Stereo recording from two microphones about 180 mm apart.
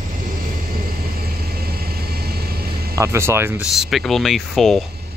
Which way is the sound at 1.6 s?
60° right (ahead or behind).